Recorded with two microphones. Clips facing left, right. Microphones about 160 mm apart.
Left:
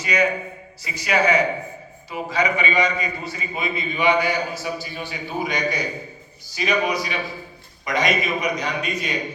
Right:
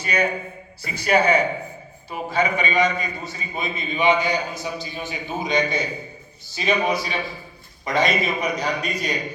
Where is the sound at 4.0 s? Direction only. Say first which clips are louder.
Even; 20° right (ahead or behind).